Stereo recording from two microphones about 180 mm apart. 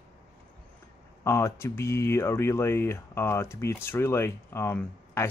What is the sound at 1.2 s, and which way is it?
Speech, 15° left (ahead or behind).